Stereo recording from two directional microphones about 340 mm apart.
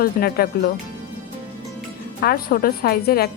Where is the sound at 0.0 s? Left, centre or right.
Left.